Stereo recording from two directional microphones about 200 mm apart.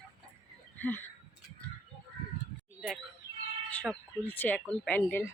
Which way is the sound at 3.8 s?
10° left (ahead or behind).